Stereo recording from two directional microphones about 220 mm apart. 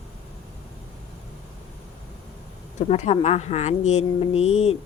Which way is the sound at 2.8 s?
30° left (ahead or behind).